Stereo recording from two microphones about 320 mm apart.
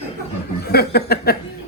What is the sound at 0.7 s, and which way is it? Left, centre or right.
Speech, left.